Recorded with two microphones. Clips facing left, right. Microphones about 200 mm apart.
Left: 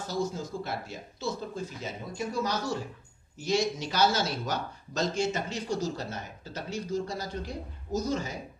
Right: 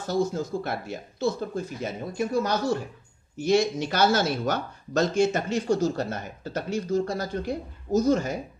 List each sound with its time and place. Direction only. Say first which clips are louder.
0.1 s speech: right 7 dB; 60° right (ahead or behind)